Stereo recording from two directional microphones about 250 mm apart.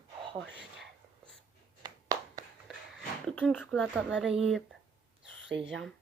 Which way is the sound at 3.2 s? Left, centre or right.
Centre.